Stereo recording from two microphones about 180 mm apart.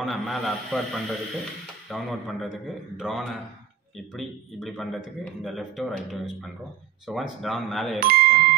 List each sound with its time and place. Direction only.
0.0 s a man's voice: centre (ahead or behind)
8.0 s speech: 55° right (ahead or behind)